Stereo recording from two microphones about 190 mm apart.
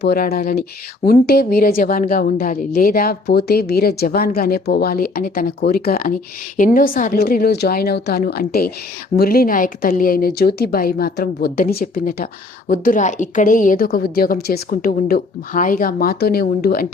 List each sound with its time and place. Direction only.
0.0 s speech: 55° left (ahead or behind)